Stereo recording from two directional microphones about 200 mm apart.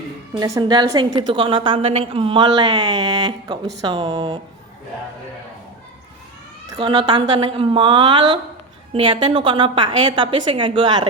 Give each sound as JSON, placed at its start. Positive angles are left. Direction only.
{"t": 0.3, "sound": "a woman's voice", "side_deg": -15}
{"t": 6.7, "sound": "a woman's voice", "side_deg": -20}